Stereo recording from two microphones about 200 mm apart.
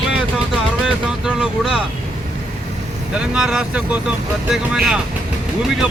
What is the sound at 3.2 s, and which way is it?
Speech, 5° right (ahead or behind).